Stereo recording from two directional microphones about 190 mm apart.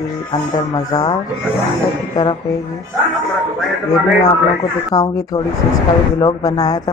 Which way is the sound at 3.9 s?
20° left (ahead or behind).